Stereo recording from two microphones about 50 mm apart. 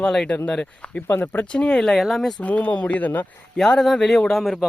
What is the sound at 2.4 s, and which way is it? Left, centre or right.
Speech, left.